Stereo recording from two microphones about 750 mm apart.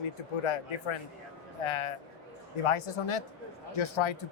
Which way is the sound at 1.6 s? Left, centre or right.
Left.